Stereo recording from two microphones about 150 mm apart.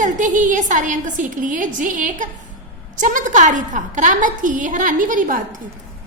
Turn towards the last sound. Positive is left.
turn(degrees=-60)  # may be behind; listen again after turning